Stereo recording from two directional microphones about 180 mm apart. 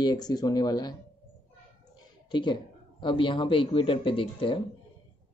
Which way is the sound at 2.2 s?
25° left (ahead or behind).